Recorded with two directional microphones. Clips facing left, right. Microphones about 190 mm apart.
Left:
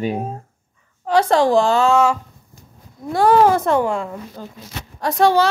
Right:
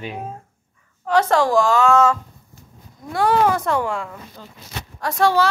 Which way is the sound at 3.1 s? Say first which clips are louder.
Left 4 dB; 35° left (ahead or behind).